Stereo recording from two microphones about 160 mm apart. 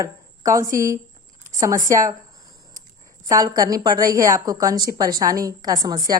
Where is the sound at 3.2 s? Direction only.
20° right (ahead or behind).